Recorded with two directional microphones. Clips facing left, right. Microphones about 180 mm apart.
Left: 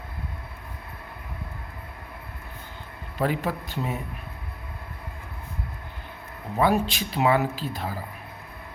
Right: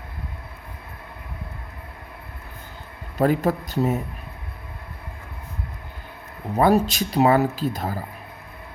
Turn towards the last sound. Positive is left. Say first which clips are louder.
# right 5 dB
turn(degrees=-40)  # may be behind; listen again after turning